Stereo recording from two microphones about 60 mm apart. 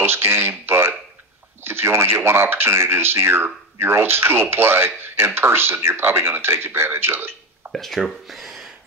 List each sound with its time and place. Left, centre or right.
0.0 s a sound: right
1.6 s speech: right
7.7 s speech: centre